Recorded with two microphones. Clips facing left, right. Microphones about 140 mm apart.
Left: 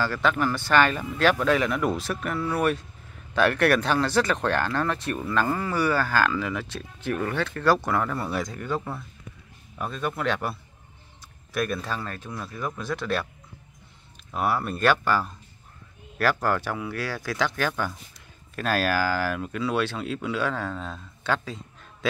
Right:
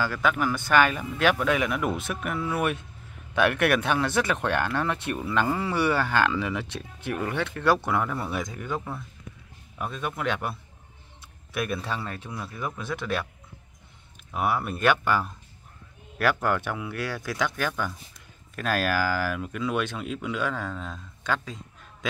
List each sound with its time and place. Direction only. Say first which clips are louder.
0.0 s a man's voice: left 1 dB; 10° right (ahead or behind)
3.3 s speech: left 2 dB; 15° right (ahead or behind)
4.1 s a man's voice: left 2 dB; 5° right (ahead or behind)
4.5 s speech: left 1 dB; 15° right (ahead or behind)
7.7 s a man's voice: left 1 dB; 5° right (ahead or behind)
11.5 s speech: left 2 dB; 10° right (ahead or behind)
14.3 s speech: left 1 dB; 10° right (ahead or behind)
16.2 s a man's voice: left 1 dB; centre (ahead or behind)